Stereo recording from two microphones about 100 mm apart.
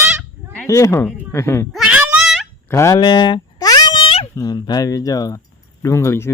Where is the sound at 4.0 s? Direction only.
60° left (ahead or behind).